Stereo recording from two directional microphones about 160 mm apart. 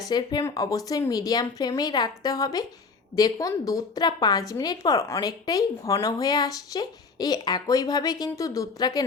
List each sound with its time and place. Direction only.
0.1 s a woman's voice: 25° left (ahead or behind)